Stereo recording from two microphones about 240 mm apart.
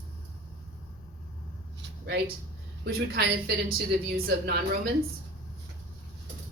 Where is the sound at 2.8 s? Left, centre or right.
Right.